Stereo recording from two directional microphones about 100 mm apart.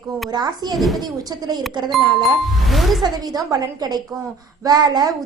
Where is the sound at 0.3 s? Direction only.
45° right (ahead or behind).